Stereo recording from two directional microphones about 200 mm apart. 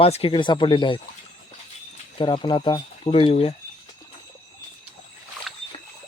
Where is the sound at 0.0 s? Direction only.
30° left (ahead or behind).